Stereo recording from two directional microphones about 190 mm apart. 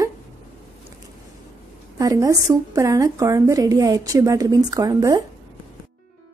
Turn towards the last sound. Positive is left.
turn(degrees=-20)  # may be behind; listen again after turning